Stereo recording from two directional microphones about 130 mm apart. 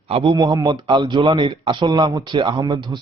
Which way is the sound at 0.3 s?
30° right (ahead or behind).